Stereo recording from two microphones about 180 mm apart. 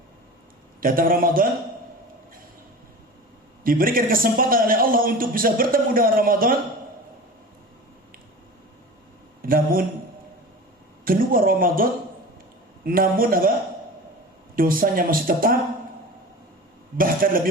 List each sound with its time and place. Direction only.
0.8 s a man's voice: 50° right (ahead or behind)
3.6 s a man's voice: 50° right (ahead or behind)
9.4 s speech: 50° right (ahead or behind)
11.0 s a man's voice: 55° right (ahead or behind)
14.5 s a man's voice: 55° right (ahead or behind)
17.0 s a man's voice: 50° right (ahead or behind)